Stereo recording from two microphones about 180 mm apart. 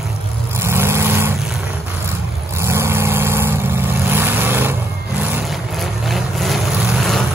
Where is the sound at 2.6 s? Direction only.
15° right (ahead or behind).